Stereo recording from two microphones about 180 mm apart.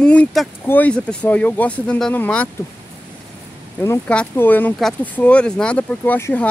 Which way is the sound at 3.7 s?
10° left (ahead or behind).